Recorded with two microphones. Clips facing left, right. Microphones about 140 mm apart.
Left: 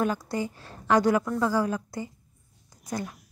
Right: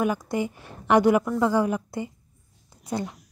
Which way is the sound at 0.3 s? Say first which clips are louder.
Right 3 dB; 20° right (ahead or behind).